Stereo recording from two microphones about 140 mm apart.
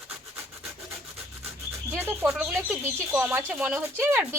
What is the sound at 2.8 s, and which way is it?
Speech, 15° right (ahead or behind).